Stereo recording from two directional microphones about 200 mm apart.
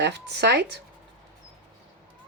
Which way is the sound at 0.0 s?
55° right (ahead or behind).